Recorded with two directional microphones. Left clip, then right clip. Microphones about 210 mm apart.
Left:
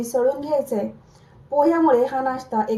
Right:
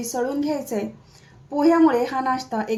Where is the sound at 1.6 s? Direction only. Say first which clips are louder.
Left 1 dB; 65° right (ahead or behind).